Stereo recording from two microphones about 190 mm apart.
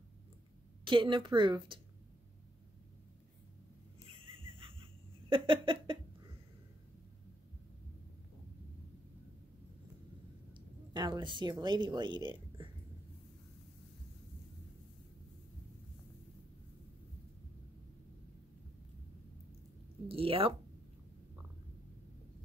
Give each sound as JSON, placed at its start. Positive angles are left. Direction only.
{"t": 0.8, "sound": "a woman's voice", "side_deg": -25}
{"t": 4.2, "sound": "music", "side_deg": -30}
{"t": 5.3, "sound": "a woman's voice", "side_deg": -25}
{"t": 10.5, "sound": "speech", "side_deg": -20}
{"t": 20.1, "sound": "a woman's voice", "side_deg": -30}